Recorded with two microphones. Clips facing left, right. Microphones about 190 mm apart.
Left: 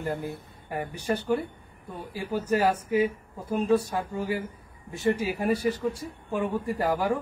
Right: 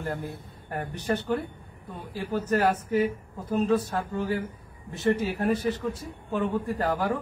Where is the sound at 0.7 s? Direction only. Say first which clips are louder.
Even; 10° left (ahead or behind).